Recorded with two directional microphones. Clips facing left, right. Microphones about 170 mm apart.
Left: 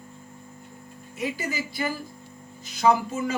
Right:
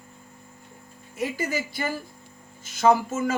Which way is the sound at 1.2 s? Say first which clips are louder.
Right 2 dB; 50° right (ahead or behind).